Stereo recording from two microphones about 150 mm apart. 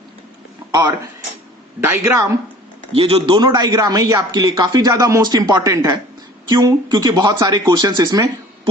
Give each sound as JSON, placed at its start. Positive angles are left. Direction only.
{"t": 0.7, "sound": "speech", "side_deg": -30}
{"t": 1.8, "sound": "speech", "side_deg": -15}
{"t": 2.9, "sound": "speech", "side_deg": -40}